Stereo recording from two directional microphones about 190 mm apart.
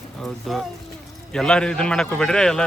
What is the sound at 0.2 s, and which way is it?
A man's voice, centre (ahead or behind).